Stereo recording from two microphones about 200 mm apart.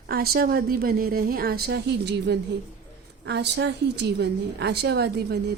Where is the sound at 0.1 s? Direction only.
50° right (ahead or behind).